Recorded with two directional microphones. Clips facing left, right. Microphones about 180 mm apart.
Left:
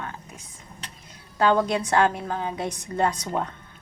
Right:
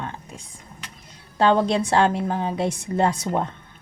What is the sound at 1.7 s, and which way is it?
A woman's voice, 30° right (ahead or behind).